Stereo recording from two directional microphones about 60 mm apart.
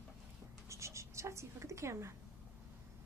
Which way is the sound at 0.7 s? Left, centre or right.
Right.